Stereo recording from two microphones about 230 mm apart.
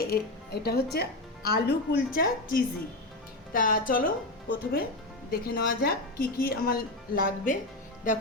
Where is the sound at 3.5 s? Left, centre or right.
Left.